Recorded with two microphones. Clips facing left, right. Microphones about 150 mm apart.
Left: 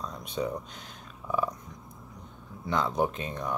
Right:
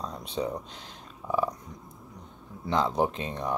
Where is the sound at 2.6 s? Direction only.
30° right (ahead or behind).